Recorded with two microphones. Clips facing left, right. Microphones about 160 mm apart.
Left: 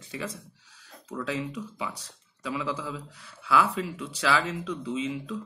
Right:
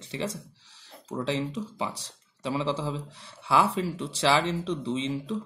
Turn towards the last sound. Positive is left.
turn(degrees=-30)  # may be behind; listen again after turning